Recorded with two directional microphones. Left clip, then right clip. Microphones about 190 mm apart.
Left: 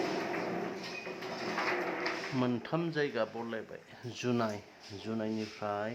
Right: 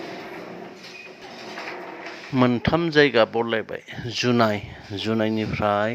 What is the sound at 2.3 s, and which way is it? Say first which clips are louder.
Speech: right 18 dB; 25° right (ahead or behind).